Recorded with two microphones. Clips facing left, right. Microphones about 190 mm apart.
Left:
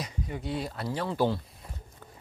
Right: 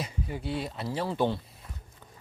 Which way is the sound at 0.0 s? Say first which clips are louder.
Right 1 dB; 30° right (ahead or behind).